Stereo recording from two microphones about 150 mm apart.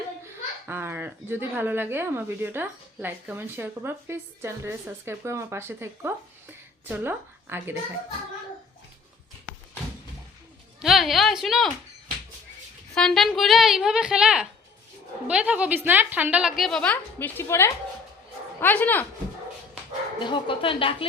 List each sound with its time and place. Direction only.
0.7 s speech: 15° right (ahead or behind)
10.8 s a woman's voice: centre (ahead or behind)
12.9 s a woman's voice: 5° left (ahead or behind)
20.1 s a woman's voice: 35° left (ahead or behind)